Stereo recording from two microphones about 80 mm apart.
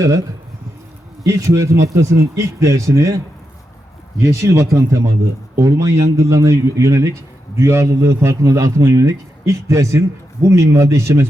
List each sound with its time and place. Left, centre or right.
1.2 s a man's voice: right
4.2 s a man's voice: right